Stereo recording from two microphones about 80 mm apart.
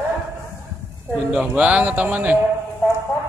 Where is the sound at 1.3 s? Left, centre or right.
Centre.